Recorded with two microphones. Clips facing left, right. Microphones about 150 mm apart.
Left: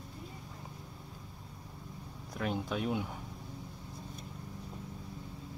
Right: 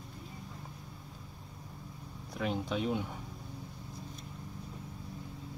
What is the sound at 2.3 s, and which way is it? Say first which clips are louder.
Speech: right 1 dB; centre (ahead or behind).